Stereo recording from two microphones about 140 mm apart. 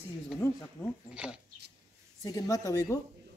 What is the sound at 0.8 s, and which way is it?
Speech, 5° left (ahead or behind).